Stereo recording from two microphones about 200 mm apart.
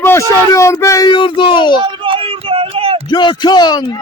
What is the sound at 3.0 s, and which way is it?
Speech, 25° left (ahead or behind).